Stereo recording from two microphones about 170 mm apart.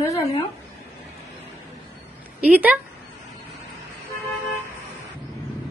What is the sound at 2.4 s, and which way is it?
Speech, 10° right (ahead or behind).